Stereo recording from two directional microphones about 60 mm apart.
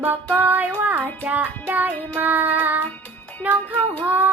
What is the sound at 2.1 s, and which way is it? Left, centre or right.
Child singing, right.